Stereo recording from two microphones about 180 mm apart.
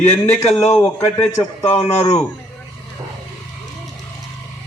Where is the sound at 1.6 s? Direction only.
35° left (ahead or behind).